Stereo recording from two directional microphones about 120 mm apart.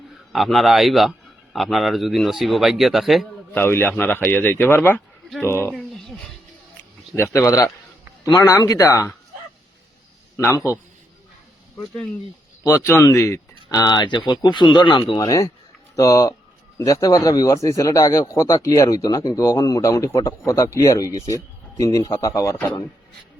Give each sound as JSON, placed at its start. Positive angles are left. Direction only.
{"t": 0.3, "sound": "a man's voice", "side_deg": 0}
{"t": 3.5, "sound": "speech", "side_deg": 15}
{"t": 7.2, "sound": "speech", "side_deg": 25}
{"t": 10.3, "sound": "a man's voice", "side_deg": 25}
{"t": 12.6, "sound": "speech", "side_deg": 25}